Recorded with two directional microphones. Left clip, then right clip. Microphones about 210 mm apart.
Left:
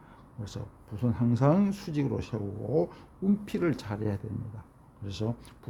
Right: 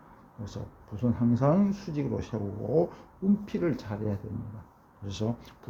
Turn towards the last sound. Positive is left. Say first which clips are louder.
# right 1 dB
turn(degrees=20)  # may be behind; listen again after turning